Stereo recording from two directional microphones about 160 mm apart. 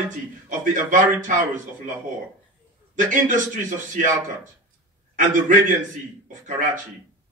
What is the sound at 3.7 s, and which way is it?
Speech, 50° right (ahead or behind).